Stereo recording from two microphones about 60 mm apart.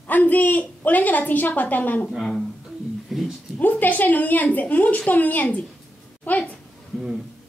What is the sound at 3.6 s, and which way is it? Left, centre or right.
A woman's voice, left.